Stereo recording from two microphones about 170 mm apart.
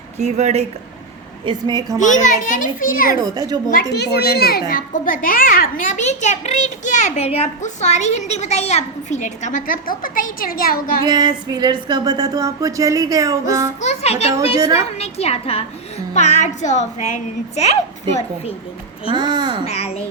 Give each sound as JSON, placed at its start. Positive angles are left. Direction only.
{"t": 0.2, "sound": "speech", "side_deg": -40}
{"t": 1.5, "sound": "music", "side_deg": -25}
{"t": 2.0, "sound": "a child's voice", "side_deg": 45}
{"t": 3.2, "sound": "music", "side_deg": -20}
{"t": 3.7, "sound": "a child's voice", "side_deg": 65}
{"t": 11.0, "sound": "music", "side_deg": -25}
{"t": 13.5, "sound": "a child's voice", "side_deg": -15}
{"t": 13.8, "sound": "a woman's voice", "side_deg": 40}
{"t": 19.1, "sound": "music", "side_deg": -25}
{"t": 19.6, "sound": "a woman's voice", "side_deg": 35}